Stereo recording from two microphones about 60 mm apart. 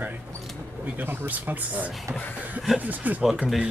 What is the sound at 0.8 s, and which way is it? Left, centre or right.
Speech, right.